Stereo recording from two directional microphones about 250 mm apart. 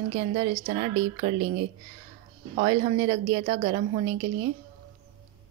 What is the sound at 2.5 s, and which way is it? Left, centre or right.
A woman's voice, right.